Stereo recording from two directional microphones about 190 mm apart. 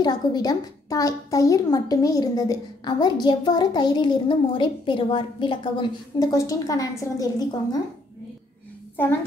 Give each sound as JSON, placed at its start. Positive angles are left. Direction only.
{"t": 0.0, "sound": "a woman's voice", "side_deg": 20}